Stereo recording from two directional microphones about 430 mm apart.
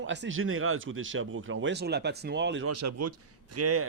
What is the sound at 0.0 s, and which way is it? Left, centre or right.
Speech, right.